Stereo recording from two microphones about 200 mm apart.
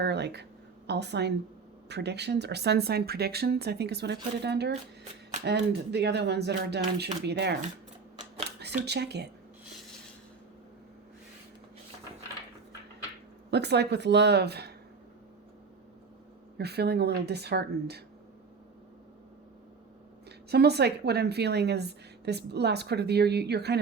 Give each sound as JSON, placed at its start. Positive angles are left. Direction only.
{"t": 0.0, "sound": "a woman's voice", "side_deg": -55}
{"t": 13.5, "sound": "a woman's voice", "side_deg": -55}
{"t": 16.6, "sound": "a woman's voice", "side_deg": -55}
{"t": 20.5, "sound": "a woman's voice", "side_deg": -55}